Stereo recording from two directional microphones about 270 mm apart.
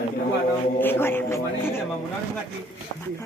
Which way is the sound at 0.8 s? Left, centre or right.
Centre.